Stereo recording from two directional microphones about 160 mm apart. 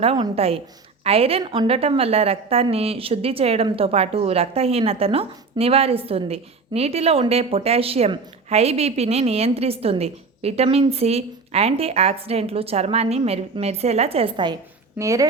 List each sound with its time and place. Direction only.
0.0 s a woman's voice: 35° right (ahead or behind); by 15.3 s 20° right (ahead or behind)